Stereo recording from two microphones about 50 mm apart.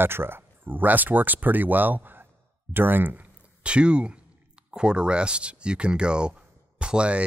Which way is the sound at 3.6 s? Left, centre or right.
Right.